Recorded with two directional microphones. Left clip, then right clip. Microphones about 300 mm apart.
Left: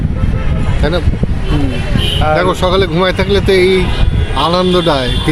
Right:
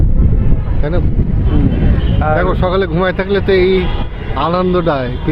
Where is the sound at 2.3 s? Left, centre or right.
Centre.